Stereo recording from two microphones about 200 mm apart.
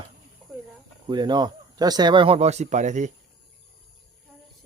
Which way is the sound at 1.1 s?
20° right (ahead or behind).